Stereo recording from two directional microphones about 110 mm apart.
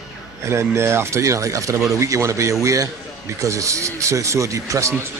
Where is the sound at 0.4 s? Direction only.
25° right (ahead or behind).